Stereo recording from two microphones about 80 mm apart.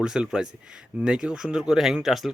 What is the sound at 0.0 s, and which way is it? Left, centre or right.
Speech, centre.